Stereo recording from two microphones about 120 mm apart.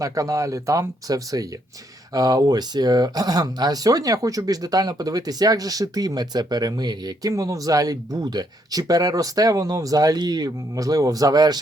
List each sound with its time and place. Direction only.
0.0 s speech: 30° right (ahead or behind)